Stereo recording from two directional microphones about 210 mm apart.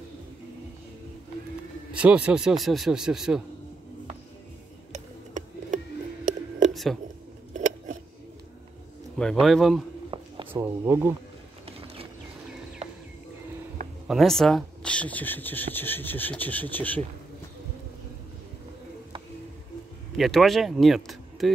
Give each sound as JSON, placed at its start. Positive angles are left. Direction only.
{"t": 1.9, "sound": "speech", "side_deg": -5}
{"t": 4.9, "sound": "music", "side_deg": -35}
{"t": 6.7, "sound": "a sound", "side_deg": 0}
{"t": 9.2, "sound": "speech", "side_deg": 0}
{"t": 10.1, "sound": "a sound", "side_deg": -25}
{"t": 10.5, "sound": "speech", "side_deg": -10}
{"t": 11.6, "sound": "vehicle", "side_deg": -25}
{"t": 14.0, "sound": "speech", "side_deg": 0}
{"t": 20.2, "sound": "speech", "side_deg": 0}